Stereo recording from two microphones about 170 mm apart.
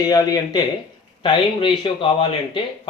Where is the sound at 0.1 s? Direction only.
20° left (ahead or behind).